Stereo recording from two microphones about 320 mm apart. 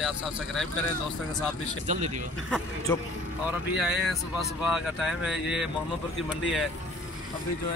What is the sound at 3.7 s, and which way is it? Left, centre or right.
Speech, centre.